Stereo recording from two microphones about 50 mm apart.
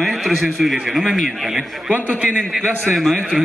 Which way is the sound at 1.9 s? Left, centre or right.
Right.